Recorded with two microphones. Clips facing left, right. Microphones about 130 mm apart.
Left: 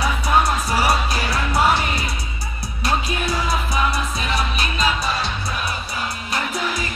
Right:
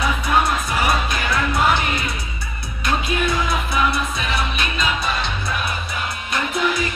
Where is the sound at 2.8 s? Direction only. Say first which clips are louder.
Right 1 dB; 35° left (ahead or behind).